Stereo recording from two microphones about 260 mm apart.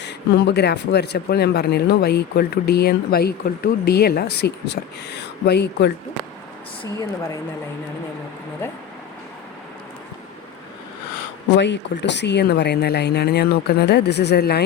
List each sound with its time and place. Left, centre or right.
0.0 s speech: left
11.4 s speech: left